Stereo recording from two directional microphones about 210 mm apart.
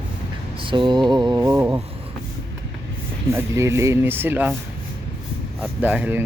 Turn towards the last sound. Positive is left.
turn(degrees=-5)  # may be behind; listen again after turning